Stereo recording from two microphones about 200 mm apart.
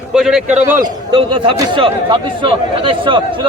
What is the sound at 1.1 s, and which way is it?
A man's voice, 25° right (ahead or behind).